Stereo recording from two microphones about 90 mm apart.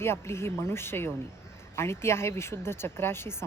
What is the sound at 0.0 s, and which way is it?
Speech, 30° left (ahead or behind).